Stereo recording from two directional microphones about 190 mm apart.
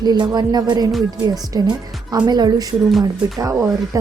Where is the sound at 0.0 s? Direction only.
20° right (ahead or behind).